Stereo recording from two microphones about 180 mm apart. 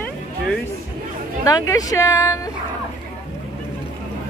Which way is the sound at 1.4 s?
20° left (ahead or behind).